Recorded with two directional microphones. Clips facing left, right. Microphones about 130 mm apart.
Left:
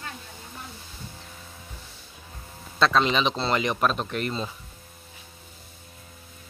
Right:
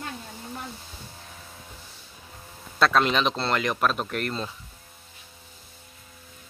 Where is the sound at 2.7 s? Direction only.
5° right (ahead or behind).